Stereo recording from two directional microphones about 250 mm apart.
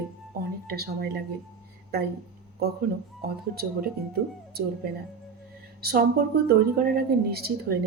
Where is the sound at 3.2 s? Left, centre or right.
Right.